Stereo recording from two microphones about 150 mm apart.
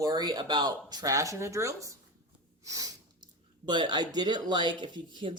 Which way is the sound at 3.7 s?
30° right (ahead or behind).